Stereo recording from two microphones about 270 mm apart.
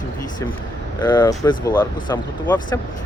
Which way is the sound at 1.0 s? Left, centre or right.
Centre.